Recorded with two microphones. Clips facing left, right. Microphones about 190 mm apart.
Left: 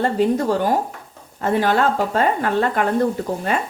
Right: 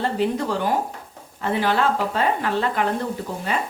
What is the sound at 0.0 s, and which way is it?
Speech, 45° left (ahead or behind).